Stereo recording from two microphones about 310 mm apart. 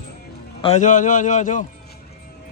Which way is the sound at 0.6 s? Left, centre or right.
Left.